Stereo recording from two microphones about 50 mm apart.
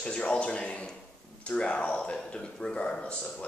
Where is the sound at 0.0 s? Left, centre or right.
Left.